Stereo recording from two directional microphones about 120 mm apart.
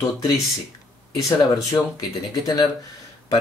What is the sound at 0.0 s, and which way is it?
Speech, 30° left (ahead or behind).